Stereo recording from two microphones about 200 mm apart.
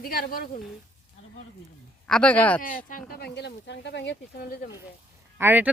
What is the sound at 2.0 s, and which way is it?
Speech, 5° left (ahead or behind).